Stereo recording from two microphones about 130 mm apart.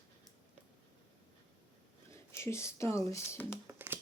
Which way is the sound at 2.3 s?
20° left (ahead or behind).